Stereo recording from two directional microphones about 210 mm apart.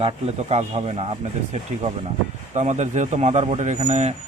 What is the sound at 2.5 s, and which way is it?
Speech, 35° right (ahead or behind).